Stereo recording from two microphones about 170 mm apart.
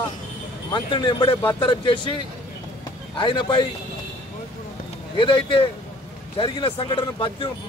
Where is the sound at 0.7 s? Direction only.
30° left (ahead or behind).